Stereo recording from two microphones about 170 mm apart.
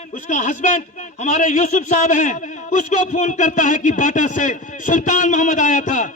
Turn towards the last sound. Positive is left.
turn(degrees=50)  # may be behind; listen again after turning